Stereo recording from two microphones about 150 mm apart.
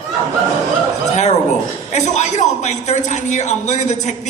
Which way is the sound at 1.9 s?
50° left (ahead or behind).